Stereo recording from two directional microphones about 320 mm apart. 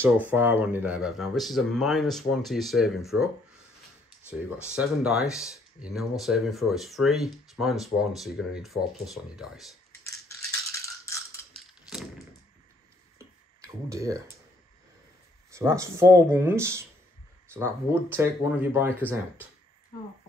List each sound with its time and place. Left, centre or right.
0.0 s speech: centre
4.7 s speech: centre
10.0 s rattle: centre
13.6 s speech: centre
15.5 s speech: centre